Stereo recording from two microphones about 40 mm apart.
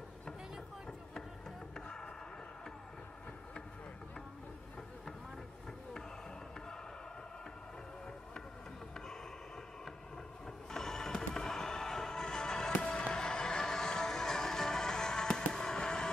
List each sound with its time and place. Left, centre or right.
10.7 s music: centre
12.7 s fireworks: left